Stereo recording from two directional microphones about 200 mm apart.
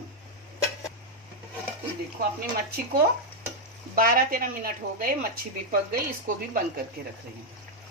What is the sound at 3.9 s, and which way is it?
A woman's voice, 45° right (ahead or behind).